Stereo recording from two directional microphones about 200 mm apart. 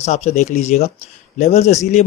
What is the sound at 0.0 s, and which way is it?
A man's voice, 35° left (ahead or behind).